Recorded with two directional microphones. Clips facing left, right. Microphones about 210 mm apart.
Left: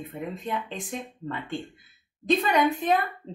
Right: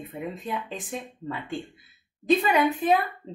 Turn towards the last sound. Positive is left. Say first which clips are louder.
# right 1 dB
turn(degrees=-5)  # may be behind; listen again after turning